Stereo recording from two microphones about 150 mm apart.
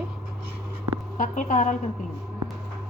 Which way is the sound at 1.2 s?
60° left (ahead or behind).